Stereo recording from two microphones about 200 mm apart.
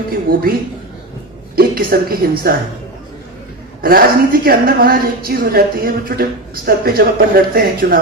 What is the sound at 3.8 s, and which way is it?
Speech, 45° right (ahead or behind).